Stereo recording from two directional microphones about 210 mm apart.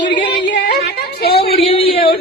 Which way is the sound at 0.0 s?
55° left (ahead or behind).